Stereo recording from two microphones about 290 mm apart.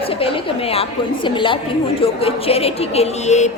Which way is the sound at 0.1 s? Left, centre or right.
Centre.